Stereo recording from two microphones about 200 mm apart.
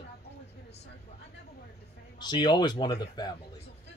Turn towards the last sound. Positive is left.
turn(degrees=20)  # may be behind; listen again after turning